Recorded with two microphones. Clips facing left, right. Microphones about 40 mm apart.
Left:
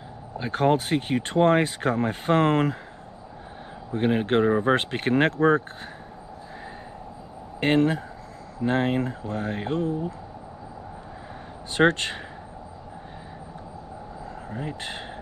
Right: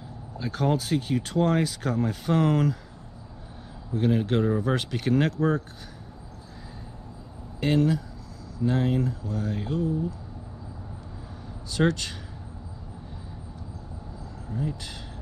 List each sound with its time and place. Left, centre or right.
0.4 s speech: left
3.9 s speech: left
7.6 s speech: left
11.7 s speech: left
14.5 s speech: left